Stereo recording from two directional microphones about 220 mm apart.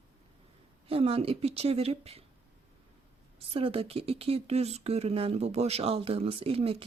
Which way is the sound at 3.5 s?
25° right (ahead or behind).